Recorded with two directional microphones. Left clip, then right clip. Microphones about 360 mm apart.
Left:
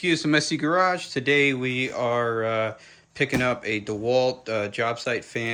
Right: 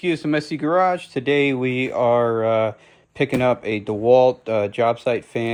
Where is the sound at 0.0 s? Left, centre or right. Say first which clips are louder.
Even; centre.